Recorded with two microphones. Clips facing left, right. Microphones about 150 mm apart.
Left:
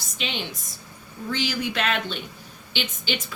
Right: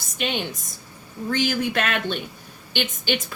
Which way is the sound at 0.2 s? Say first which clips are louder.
Right 5 dB; 50° right (ahead or behind).